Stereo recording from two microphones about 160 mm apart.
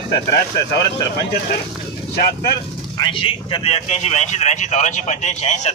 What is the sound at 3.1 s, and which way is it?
Speech, 35° left (ahead or behind).